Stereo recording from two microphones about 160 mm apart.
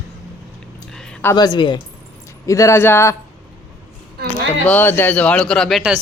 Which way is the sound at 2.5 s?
20° left (ahead or behind).